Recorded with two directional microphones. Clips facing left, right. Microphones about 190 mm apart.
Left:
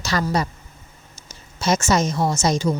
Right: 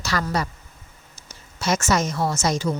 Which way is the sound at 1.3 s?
20° left (ahead or behind).